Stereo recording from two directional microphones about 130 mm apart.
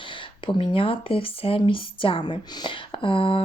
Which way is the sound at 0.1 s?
40° left (ahead or behind).